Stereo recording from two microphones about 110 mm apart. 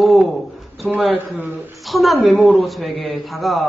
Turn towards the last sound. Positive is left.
turn(degrees=0)  # may be behind; listen again after turning